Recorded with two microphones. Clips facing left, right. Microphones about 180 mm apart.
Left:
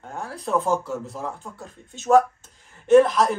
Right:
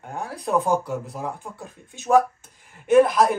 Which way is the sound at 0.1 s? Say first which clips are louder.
Right 1 dB; 15° right (ahead or behind).